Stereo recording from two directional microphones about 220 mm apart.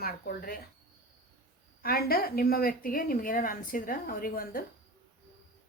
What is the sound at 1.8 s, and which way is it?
A woman's voice, 45° left (ahead or behind).